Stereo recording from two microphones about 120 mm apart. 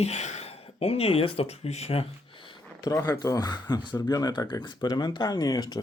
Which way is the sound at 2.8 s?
30° left (ahead or behind).